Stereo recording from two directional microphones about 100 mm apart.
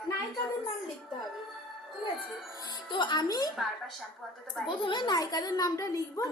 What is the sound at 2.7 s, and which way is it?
Speech, 50° left (ahead or behind).